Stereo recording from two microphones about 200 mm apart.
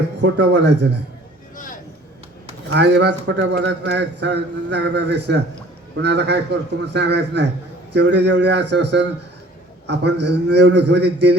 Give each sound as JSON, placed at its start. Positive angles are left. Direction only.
{"t": 0.2, "sound": "a man's voice", "side_deg": -60}
{"t": 1.5, "sound": "vehicle", "side_deg": 40}
{"t": 2.6, "sound": "a man's voice", "side_deg": -60}